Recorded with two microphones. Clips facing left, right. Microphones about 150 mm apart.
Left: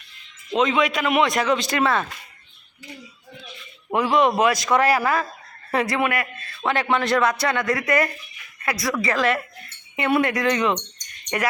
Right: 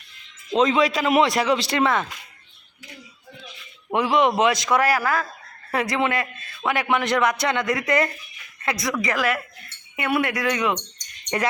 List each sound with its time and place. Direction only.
0.5 s a man's voice: 35° right (ahead or behind); by 2.0 s 20° right (ahead or behind)
3.9 s a man's voice: 15° right (ahead or behind)
4.8 s speech: centre (ahead or behind)
5.7 s a man's voice: 15° right (ahead or behind)